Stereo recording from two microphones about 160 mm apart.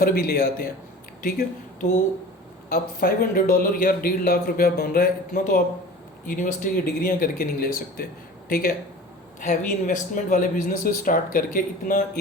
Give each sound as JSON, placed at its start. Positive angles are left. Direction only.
{"t": 0.0, "sound": "a man's voice", "side_deg": 70}
{"t": 1.2, "sound": "speech", "side_deg": 60}
{"t": 2.6, "sound": "a man's voice", "side_deg": 80}
{"t": 9.4, "sound": "a man's voice", "side_deg": 50}